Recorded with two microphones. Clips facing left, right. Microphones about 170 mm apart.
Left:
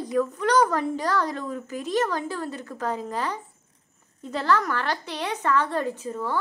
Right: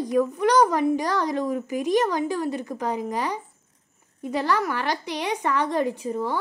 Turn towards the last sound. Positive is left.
turn(degrees=-15)  # may be behind; listen again after turning